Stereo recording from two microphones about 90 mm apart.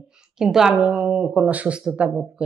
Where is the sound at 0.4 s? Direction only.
5° right (ahead or behind).